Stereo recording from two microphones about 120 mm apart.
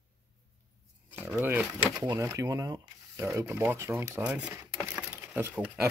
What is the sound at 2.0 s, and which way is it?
Speech, 35° right (ahead or behind).